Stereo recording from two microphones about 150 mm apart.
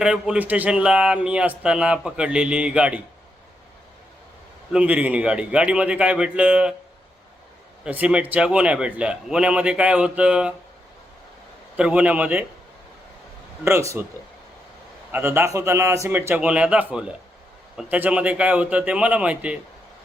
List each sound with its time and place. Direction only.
0.0 s speech: 5° right (ahead or behind)
4.7 s speech: 10° right (ahead or behind)
7.9 s speech: 10° right (ahead or behind)
11.8 s speech: 10° right (ahead or behind)
13.7 s speech: 20° right (ahead or behind)
15.1 s speech: 15° right (ahead or behind)